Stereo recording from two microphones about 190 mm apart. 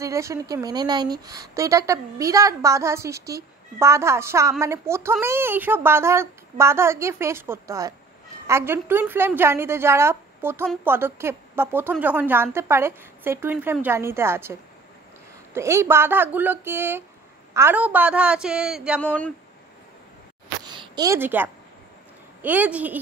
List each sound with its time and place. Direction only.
0.0 s a woman's voice: 15° right (ahead or behind)
18.9 s speech: 5° left (ahead or behind)
20.6 s a sound: 25° right (ahead or behind)
22.4 s a woman's voice: 10° right (ahead or behind)